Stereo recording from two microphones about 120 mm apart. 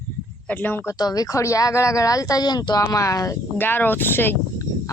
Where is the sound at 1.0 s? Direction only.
30° left (ahead or behind).